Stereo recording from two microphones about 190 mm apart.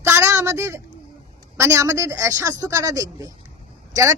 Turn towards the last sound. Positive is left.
turn(degrees=-15)  # may be behind; listen again after turning